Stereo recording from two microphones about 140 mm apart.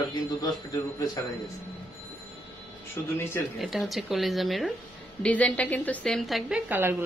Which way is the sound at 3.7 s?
Centre (ahead or behind).